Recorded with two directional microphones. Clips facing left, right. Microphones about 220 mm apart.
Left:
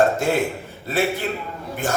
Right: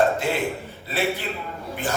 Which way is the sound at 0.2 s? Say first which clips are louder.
Left 4 dB; 45° left (ahead or behind).